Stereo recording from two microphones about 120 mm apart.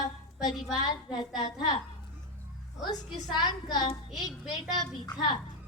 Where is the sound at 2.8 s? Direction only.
35° left (ahead or behind).